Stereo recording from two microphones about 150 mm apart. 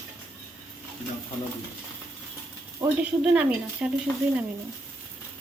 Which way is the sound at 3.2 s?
10° right (ahead or behind).